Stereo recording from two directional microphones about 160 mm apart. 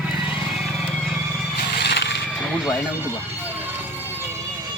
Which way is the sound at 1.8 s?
90° left.